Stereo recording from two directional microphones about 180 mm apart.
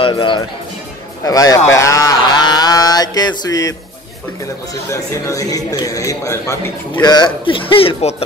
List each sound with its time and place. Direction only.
0.0 s speech: 25° left (ahead or behind)
1.7 s a sound: 15° left (ahead or behind)
4.8 s speech: 20° left (ahead or behind); by 8.2 s 35° left (ahead or behind)